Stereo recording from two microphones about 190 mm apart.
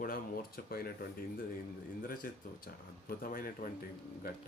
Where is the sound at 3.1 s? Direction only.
50° left (ahead or behind).